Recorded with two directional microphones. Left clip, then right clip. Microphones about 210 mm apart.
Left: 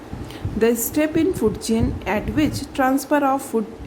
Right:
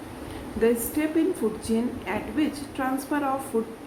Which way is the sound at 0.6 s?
50° left (ahead or behind).